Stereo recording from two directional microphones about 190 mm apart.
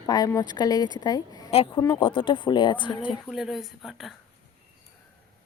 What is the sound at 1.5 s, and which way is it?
Speech, 30° left (ahead or behind).